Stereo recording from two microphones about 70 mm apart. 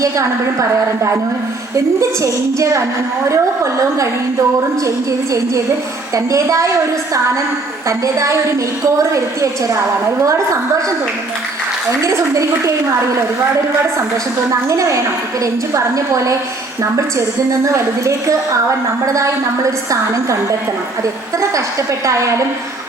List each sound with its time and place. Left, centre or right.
1.7 s a woman's voice: right
6.1 s a woman's voice: right
7.9 s a woman's voice: right
12.0 s a woman's voice: right
14.7 s a woman's voice: right
17.7 s a woman's voice: right
21.5 s a woman's voice: right